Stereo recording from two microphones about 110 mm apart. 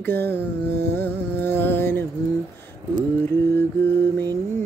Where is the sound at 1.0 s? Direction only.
20° left (ahead or behind).